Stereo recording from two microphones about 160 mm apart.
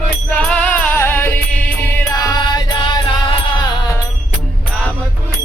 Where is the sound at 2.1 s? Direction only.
25° left (ahead or behind).